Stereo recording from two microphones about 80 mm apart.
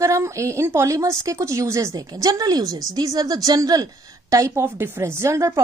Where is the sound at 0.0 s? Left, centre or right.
Right.